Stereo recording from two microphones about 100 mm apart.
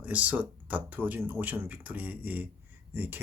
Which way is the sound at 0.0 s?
15° right (ahead or behind).